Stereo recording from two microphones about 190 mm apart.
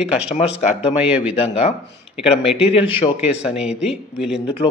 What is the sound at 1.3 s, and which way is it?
Speech, 30° left (ahead or behind).